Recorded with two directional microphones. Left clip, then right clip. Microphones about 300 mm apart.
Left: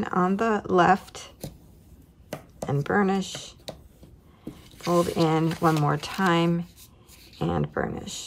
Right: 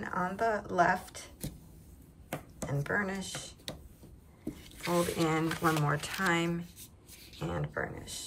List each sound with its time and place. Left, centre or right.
0.0 s speech: centre
2.6 s speech: centre
4.6 s speech: centre